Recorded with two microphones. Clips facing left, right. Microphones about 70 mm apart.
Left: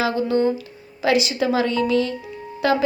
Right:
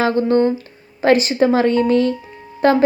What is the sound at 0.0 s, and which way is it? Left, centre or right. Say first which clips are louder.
A woman's voice: right 4 dB; right.